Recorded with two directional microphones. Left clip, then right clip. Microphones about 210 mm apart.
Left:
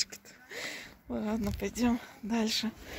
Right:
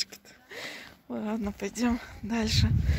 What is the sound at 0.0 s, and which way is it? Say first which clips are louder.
A woman's voice: right 1 dB; 5° right (ahead or behind).